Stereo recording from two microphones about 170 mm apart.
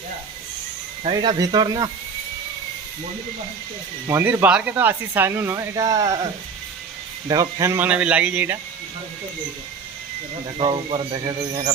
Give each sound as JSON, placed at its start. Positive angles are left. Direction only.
{"t": 1.0, "sound": "speech", "side_deg": -30}
{"t": 4.0, "sound": "speech", "side_deg": -15}
{"t": 7.3, "sound": "speech", "side_deg": -20}
{"t": 10.6, "sound": "speech", "side_deg": -30}